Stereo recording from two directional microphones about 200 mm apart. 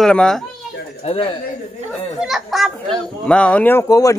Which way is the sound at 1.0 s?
30° left (ahead or behind).